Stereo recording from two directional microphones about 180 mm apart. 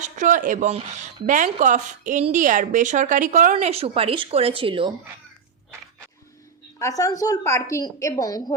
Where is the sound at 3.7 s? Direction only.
30° right (ahead or behind).